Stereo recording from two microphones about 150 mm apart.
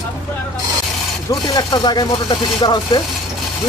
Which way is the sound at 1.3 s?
25° left (ahead or behind).